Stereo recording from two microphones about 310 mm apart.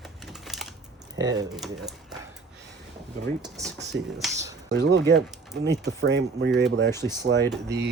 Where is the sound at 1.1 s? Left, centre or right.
Centre.